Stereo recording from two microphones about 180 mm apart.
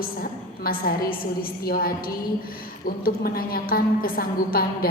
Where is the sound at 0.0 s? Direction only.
55° left (ahead or behind).